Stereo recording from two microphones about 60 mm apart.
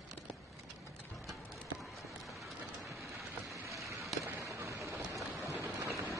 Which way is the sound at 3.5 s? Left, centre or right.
Right.